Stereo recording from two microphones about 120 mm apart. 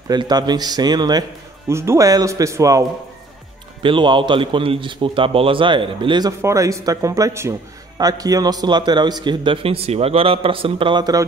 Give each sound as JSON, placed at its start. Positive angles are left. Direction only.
{"t": 0.1, "sound": "a man's voice", "side_deg": -35}
{"t": 1.7, "sound": "speech", "side_deg": -20}
{"t": 3.8, "sound": "a man's voice", "side_deg": -45}
{"t": 6.4, "sound": "a man's voice", "side_deg": -25}